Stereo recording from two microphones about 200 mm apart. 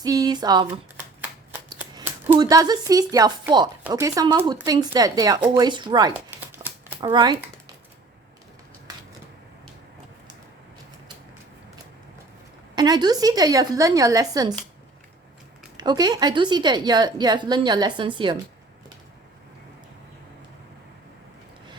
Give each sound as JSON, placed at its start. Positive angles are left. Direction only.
{"t": 0.0, "sound": "speech", "side_deg": -20}
{"t": 2.4, "sound": "speech", "side_deg": -20}
{"t": 7.0, "sound": "a woman's voice", "side_deg": -20}
{"t": 12.7, "sound": "a woman's voice", "side_deg": -20}
{"t": 15.8, "sound": "a woman's voice", "side_deg": -20}